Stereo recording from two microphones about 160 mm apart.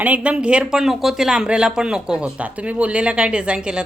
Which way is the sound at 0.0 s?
10° right (ahead or behind).